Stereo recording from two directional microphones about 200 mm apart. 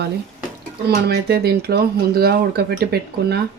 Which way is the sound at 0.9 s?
50° right (ahead or behind).